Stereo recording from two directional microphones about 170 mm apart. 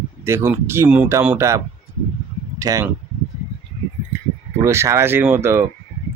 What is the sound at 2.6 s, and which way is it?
Speech, 20° right (ahead or behind).